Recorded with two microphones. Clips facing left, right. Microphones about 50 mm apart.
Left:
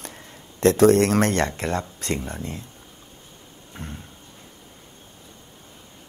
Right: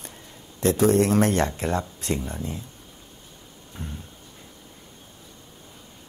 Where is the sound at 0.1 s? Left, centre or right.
Left.